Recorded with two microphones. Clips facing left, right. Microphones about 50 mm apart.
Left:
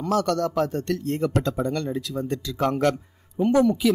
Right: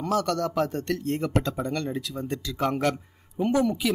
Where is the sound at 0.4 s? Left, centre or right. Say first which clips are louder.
Left 2 dB; right.